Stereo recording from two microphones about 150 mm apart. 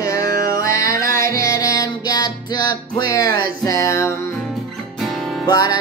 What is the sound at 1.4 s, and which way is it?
Music, 25° left (ahead or behind).